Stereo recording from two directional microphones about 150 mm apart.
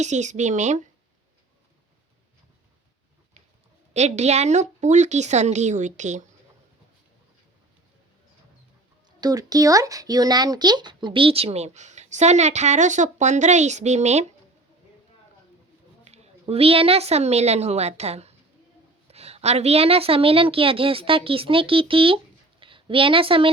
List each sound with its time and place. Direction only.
0.0 s speech: 50° right (ahead or behind)
3.9 s speech: 50° right (ahead or behind)
9.2 s speech: 25° right (ahead or behind); by 14.3 s 50° right (ahead or behind)
16.0 s a woman's voice: 45° right (ahead or behind)